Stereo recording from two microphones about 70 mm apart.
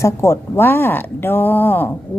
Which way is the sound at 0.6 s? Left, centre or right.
Left.